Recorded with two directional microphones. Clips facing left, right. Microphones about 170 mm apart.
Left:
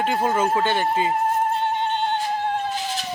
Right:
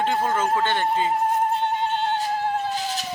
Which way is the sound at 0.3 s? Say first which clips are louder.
Left 2 dB; 10° left (ahead or behind).